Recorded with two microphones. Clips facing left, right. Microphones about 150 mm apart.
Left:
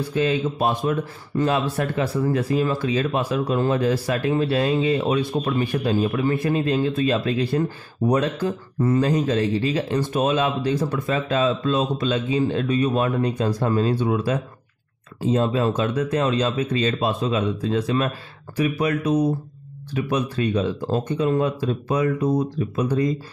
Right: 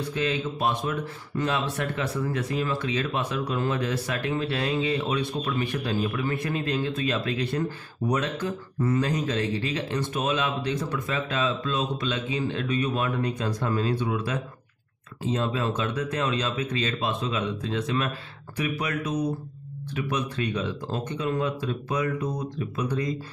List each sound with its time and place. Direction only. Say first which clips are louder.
0.1 s speech: left 7 dB; 35° left (ahead or behind)
4.8 s speech: left 6 dB; 45° left (ahead or behind)
5.4 s speech: left 5 dB; 35° left (ahead or behind)
15.3 s speech: left 6 dB; 35° left (ahead or behind)